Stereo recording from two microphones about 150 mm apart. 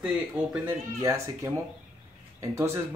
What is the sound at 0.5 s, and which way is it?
Speech, 20° right (ahead or behind).